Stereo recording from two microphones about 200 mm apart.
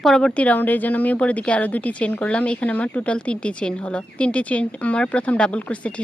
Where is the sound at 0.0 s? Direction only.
Centre (ahead or behind).